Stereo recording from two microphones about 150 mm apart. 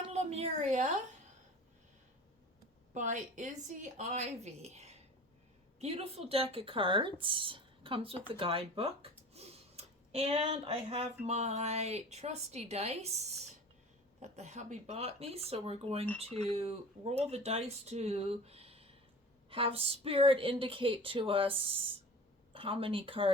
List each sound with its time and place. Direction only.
0.1 s a woman's voice: 45° right (ahead or behind)
2.9 s speech: 55° right (ahead or behind)
14.2 s a woman's voice: 50° right (ahead or behind)